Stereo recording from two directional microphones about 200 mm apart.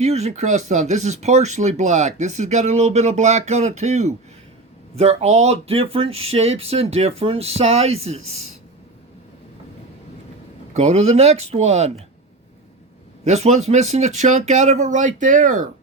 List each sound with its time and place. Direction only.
0.0 s speech: 35° right (ahead or behind)
10.8 s speech: 30° right (ahead or behind)
13.2 s speech: 35° right (ahead or behind)